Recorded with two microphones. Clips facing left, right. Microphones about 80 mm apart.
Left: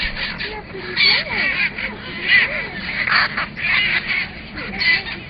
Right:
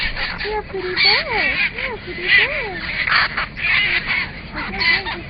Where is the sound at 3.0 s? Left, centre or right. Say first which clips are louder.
Even; centre.